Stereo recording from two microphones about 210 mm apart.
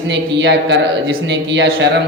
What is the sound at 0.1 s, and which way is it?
A man's voice, 55° right (ahead or behind).